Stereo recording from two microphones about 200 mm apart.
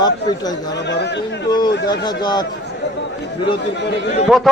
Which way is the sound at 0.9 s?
60° left (ahead or behind).